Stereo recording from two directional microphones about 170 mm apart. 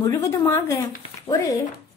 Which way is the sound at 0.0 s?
20° left (ahead or behind).